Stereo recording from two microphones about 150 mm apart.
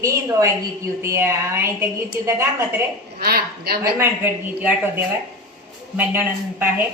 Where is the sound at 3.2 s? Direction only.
90° right.